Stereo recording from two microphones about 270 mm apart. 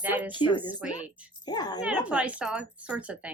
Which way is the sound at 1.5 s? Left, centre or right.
Centre.